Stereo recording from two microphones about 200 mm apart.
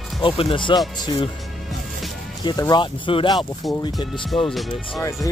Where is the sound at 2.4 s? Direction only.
20° left (ahead or behind).